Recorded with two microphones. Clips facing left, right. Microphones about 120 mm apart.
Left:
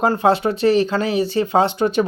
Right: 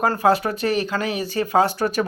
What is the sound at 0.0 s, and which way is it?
Speech, 25° left (ahead or behind).